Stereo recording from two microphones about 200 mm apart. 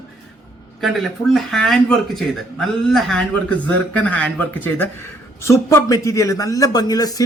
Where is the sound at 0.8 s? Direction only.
Centre (ahead or behind).